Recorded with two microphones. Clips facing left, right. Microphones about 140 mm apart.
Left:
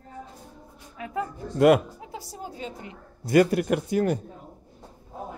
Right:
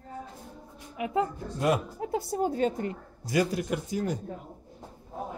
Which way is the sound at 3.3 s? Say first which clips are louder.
Left 7 dB; 60° left (ahead or behind).